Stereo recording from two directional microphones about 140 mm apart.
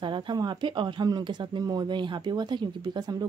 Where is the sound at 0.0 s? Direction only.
35° right (ahead or behind).